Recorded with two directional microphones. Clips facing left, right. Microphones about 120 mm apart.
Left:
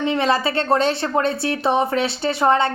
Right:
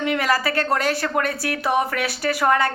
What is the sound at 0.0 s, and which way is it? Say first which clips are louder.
A woman's voice: left 2 dB; 25° left (ahead or behind).